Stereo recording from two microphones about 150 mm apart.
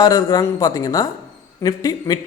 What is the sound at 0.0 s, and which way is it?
A man's voice, 25° left (ahead or behind).